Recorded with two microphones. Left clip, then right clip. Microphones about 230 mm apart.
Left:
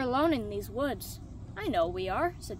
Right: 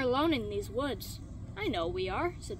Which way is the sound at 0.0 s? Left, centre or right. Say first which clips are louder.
Left 1 dB; left.